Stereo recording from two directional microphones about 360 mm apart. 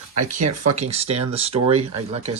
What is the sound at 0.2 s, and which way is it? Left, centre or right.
Speech, right.